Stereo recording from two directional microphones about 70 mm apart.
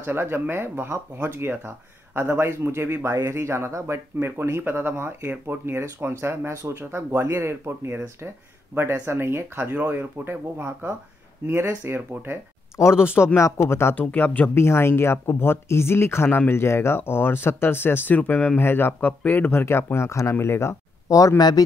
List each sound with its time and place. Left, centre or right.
0.0 s speech: right
13.0 s speech: left
13.9 s speech: left
14.5 s speech: left
19.5 s speech: left
21.1 s speech: left